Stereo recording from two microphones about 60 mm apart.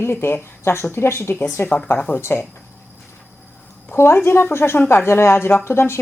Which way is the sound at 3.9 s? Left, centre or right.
Left.